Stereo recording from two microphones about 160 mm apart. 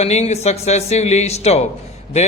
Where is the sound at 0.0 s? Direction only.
45° left (ahead or behind).